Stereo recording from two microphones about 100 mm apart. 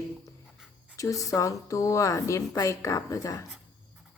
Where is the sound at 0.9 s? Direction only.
35° left (ahead or behind).